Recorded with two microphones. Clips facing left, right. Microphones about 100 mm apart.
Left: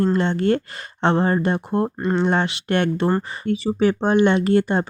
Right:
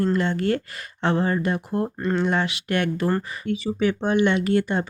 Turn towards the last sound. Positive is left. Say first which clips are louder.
# left 4 dB
turn(degrees=35)  # may be behind; listen again after turning